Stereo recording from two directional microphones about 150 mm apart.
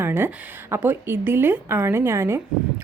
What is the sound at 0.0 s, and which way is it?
A woman's voice, 15° right (ahead or behind).